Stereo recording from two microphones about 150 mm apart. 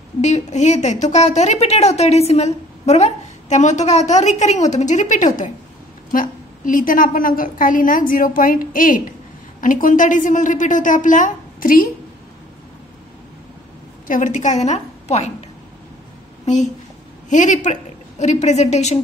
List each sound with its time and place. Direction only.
0.2 s a woman's voice: 50° left (ahead or behind); by 11.9 s 70° left (ahead or behind)
14.0 s a woman's voice: 60° left (ahead or behind)
17.3 s a woman's voice: 55° left (ahead or behind)